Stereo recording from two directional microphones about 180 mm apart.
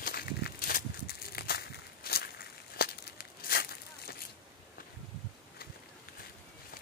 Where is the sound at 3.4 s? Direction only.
60° left (ahead or behind).